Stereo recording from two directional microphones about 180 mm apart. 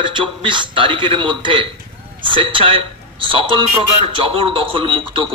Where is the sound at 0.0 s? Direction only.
25° right (ahead or behind).